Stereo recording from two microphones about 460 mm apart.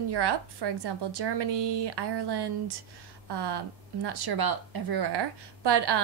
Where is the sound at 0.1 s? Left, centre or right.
Right.